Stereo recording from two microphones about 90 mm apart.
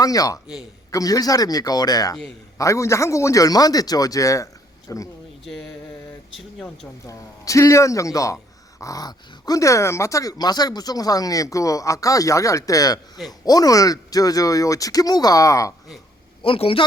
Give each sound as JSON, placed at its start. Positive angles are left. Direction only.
{"t": 0.0, "sound": "a man's voice", "side_deg": 45}
{"t": 2.6, "sound": "speech", "side_deg": 35}
{"t": 5.5, "sound": "mantra", "side_deg": 5}
{"t": 7.0, "sound": "speech", "side_deg": 35}
{"t": 16.4, "sound": "a man's voice", "side_deg": 80}